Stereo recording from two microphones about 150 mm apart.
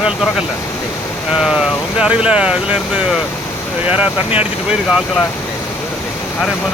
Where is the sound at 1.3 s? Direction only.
5° right (ahead or behind).